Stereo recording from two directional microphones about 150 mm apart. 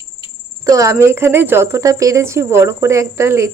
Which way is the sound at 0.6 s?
20° right (ahead or behind).